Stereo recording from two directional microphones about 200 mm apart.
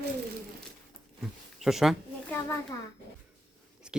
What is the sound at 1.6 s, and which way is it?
Speech, centre (ahead or behind).